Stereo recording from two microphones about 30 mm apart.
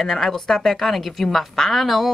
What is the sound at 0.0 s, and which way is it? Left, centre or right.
A woman's voice, centre.